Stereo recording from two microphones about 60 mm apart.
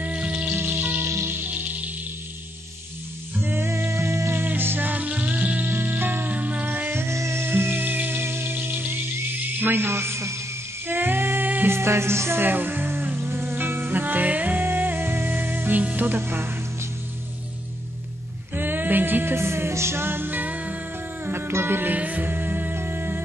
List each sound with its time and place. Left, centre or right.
0.0 s music: right
0.6 s music: right
3.3 s music: right
3.6 s music: right
4.4 s music: right
5.7 s music: right
7.0 s music: right
10.9 s music: right
11.7 s music: right
16.2 s speech: right
18.5 s music: right
19.3 s music: right
21.3 s music: right